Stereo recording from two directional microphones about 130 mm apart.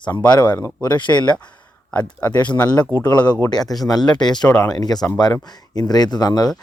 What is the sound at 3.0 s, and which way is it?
Speech, 15° left (ahead or behind).